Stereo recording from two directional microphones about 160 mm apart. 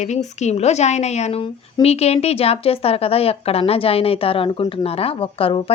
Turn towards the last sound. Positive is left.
turn(degrees=35)  # may be behind; listen again after turning